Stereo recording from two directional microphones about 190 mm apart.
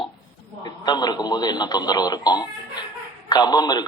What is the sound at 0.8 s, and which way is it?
Speech, 20° left (ahead or behind).